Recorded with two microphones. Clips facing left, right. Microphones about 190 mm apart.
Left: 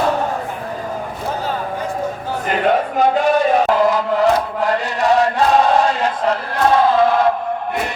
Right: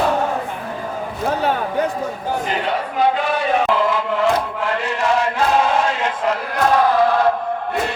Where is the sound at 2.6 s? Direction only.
45° left (ahead or behind).